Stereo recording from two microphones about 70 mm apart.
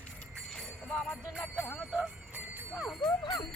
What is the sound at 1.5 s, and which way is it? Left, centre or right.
Music, centre.